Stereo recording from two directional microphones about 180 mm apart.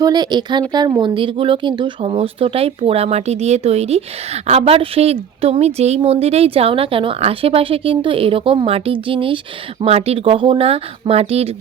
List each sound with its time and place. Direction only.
0.0 s speech: 25° right (ahead or behind)